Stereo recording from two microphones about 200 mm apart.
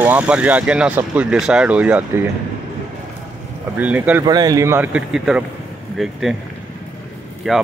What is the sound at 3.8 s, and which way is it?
Speech, 10° right (ahead or behind).